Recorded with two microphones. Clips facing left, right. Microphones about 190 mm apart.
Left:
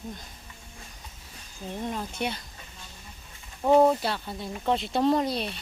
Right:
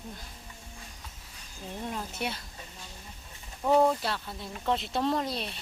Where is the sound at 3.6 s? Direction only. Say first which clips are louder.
Left 4 dB; 20° left (ahead or behind).